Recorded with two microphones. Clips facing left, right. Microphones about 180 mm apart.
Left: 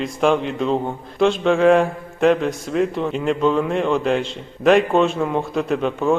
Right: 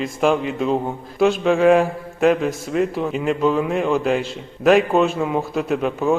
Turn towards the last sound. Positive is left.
turn(degrees=-5)  # may be behind; listen again after turning